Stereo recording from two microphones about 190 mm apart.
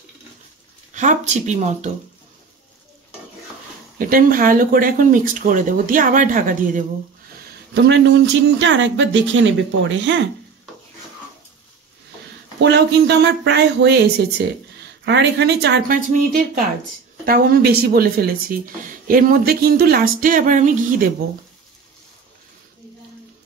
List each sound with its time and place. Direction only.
0.9 s speech: 40° right (ahead or behind)
4.0 s speech: 50° right (ahead or behind)
7.7 s speech: 70° right (ahead or behind)
12.5 s speech: 65° right (ahead or behind)
15.0 s speech: 65° right (ahead or behind)
16.1 s speech: 45° right (ahead or behind)